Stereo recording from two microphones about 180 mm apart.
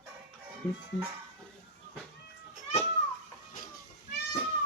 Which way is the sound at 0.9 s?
5° left (ahead or behind).